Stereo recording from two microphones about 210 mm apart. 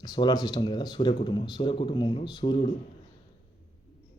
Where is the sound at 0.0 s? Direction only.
20° left (ahead or behind).